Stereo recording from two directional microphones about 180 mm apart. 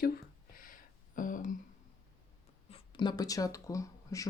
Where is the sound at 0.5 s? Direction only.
50° left (ahead or behind).